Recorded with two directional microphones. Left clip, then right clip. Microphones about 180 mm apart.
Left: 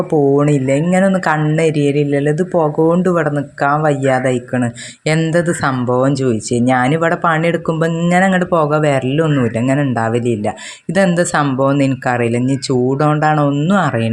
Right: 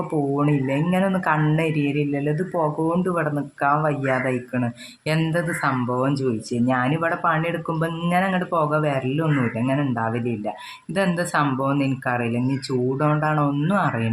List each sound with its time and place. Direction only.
0.1 s speech: 30° left (ahead or behind)